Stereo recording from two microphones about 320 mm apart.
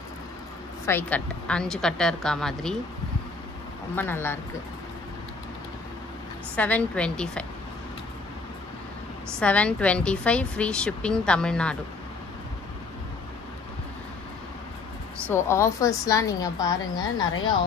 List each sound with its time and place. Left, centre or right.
0.8 s a woman's voice: centre
3.9 s a woman's voice: centre
6.5 s a woman's voice: centre
9.4 s a woman's voice: centre
15.3 s a woman's voice: centre